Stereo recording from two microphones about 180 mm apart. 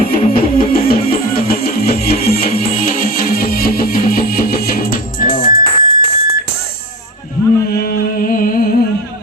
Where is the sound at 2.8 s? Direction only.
50° left (ahead or behind).